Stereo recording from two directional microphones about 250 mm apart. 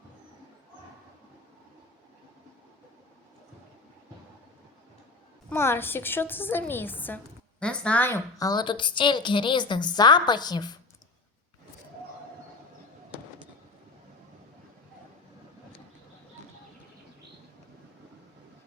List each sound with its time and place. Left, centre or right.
5.5 s a woman's voice: centre